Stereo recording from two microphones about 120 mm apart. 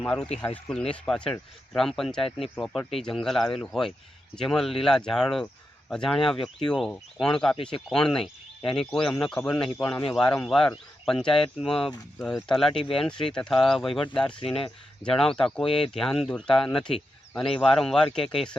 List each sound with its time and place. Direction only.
0.0 s speech: 5° left (ahead or behind)
7.5 s speech: 45° left (ahead or behind)
7.9 s speech: 5° left (ahead or behind)
11.3 s speech: 50° left (ahead or behind)
11.6 s speech: 5° left (ahead or behind)
12.7 s speech: 50° left (ahead or behind)
13.2 s speech: 5° left (ahead or behind)
14.3 s speech: 50° left (ahead or behind)
15.0 s speech: 5° left (ahead or behind)